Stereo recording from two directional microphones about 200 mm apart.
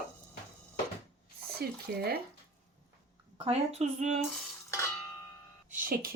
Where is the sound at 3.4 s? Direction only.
30° right (ahead or behind).